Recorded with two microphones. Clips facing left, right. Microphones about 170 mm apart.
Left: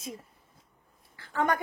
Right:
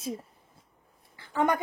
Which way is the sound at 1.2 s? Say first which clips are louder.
Right 2 dB; 20° right (ahead or behind).